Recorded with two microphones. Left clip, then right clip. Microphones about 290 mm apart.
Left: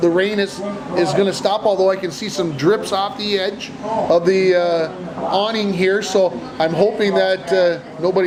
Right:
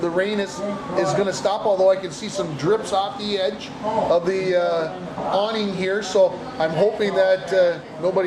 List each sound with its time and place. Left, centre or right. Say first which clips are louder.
0.0 s a man's voice: left 6 dB; left